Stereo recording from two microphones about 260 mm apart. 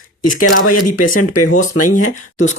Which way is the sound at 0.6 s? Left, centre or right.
Left.